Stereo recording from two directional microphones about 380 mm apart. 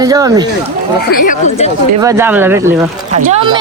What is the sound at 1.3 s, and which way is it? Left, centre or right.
Speech, centre.